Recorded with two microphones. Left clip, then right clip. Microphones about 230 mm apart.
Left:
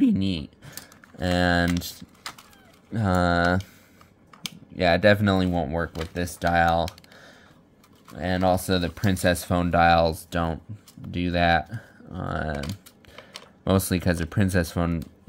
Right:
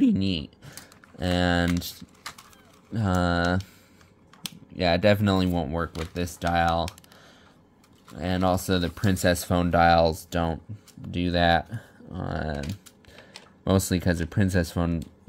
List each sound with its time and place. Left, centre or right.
0.0 s typing: centre
2.9 s speech: centre
4.7 s speech: centre